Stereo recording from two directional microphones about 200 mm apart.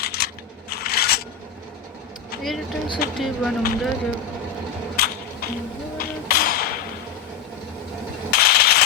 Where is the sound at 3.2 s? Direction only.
Centre (ahead or behind).